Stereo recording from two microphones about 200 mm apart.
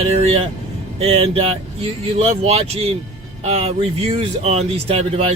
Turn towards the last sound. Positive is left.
turn(degrees=-30)  # may be behind; listen again after turning